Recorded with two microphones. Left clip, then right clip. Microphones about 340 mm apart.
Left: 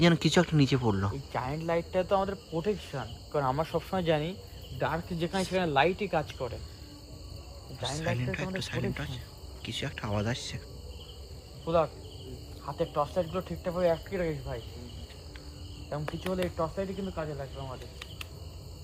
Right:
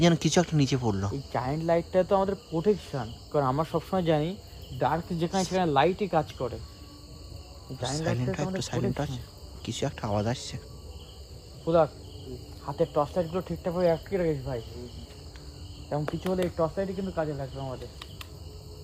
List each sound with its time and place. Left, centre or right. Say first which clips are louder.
0.0 s speech: right 1 dB; centre
1.3 s cricket: right 5 dB; right
8.2 s speech: right 3 dB; centre
11.6 s insect: right 4 dB; right
12.6 s cricket: right 4 dB; right
15.9 s cricket: right 4 dB; right